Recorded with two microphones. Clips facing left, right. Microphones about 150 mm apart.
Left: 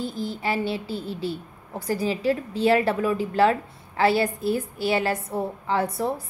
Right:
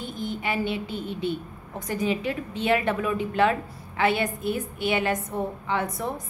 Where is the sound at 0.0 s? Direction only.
35° left (ahead or behind).